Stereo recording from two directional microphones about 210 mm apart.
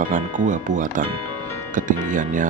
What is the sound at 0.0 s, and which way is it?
Speech, 40° right (ahead or behind).